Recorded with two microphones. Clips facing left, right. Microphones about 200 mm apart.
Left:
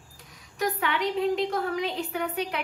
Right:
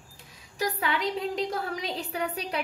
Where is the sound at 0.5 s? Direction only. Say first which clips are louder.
Left 1 dB; 35° right (ahead or behind).